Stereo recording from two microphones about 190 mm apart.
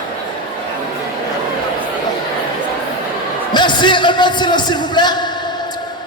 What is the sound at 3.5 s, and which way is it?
A man's voice, 25° left (ahead or behind).